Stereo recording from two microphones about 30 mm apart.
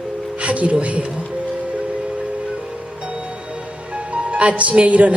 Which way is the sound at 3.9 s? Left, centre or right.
Right.